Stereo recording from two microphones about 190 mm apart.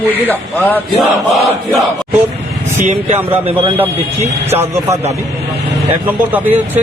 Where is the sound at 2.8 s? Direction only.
35° right (ahead or behind).